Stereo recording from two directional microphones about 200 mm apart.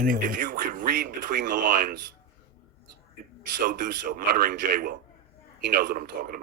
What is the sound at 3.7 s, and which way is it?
A man's voice, 45° right (ahead or behind).